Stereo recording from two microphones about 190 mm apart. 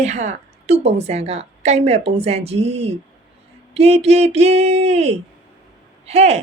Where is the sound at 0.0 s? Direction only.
35° right (ahead or behind).